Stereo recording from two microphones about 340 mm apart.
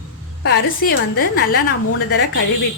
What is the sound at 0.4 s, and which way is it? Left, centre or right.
A woman's voice, left.